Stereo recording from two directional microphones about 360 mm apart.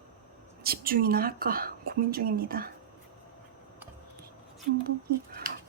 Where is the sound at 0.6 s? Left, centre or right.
Right.